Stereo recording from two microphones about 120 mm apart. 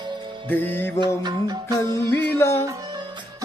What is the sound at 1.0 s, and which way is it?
Music, 35° right (ahead or behind).